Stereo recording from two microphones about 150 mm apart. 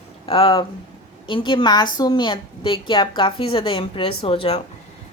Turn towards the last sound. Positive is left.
turn(degrees=35)  # may be behind; listen again after turning